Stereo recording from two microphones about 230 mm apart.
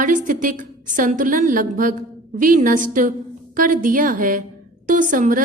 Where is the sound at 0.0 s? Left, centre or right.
Right.